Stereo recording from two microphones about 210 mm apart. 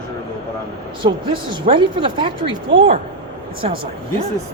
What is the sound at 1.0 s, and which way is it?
Speech, 25° right (ahead or behind).